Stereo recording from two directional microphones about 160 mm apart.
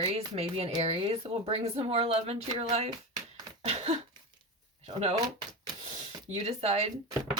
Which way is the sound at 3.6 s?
40° right (ahead or behind).